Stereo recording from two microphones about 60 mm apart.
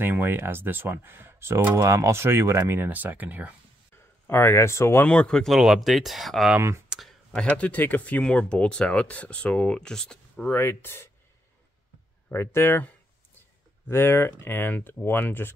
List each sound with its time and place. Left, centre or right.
0.0 s speech: right
1.8 s speech: right
2.9 s speech: right
4.3 s speech: left
5.0 s speech: centre
5.6 s speech: centre
6.9 s a sound: centre
7.3 s speech: left
10.5 s speech: left
12.3 s speech: left
13.8 s speech: left